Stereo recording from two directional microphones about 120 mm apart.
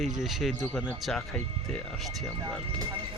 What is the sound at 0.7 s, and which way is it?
Speech, 10° left (ahead or behind).